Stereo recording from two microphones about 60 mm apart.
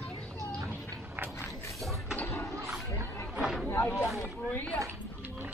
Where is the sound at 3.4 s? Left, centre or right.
Centre.